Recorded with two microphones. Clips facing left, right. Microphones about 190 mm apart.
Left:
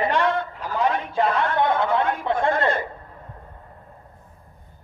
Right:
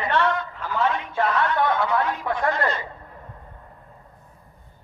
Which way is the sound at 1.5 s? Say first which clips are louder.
Left 1 dB; 25° left (ahead or behind).